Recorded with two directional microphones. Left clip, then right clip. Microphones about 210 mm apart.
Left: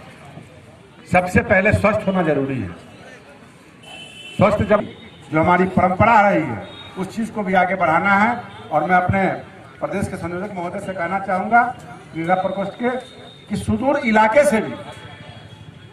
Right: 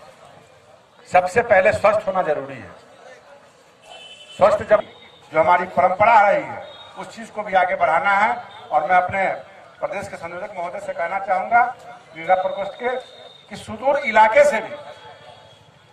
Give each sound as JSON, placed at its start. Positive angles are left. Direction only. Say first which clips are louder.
{"t": 1.1, "sound": "a man's voice", "louder": "right 1 dB", "side_deg": 45}
{"t": 4.4, "sound": "a man's voice", "louder": "right 1 dB", "side_deg": 45}